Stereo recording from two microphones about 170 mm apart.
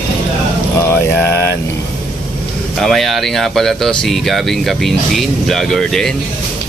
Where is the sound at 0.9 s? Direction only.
10° left (ahead or behind).